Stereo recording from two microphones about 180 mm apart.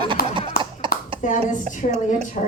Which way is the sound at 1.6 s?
40° right (ahead or behind).